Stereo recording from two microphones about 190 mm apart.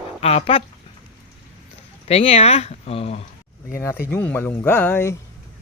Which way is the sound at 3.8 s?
10° left (ahead or behind).